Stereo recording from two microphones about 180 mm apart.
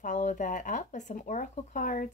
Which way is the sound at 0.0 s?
45° left (ahead or behind).